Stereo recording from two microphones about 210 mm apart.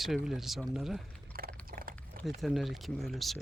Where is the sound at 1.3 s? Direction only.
45° right (ahead or behind).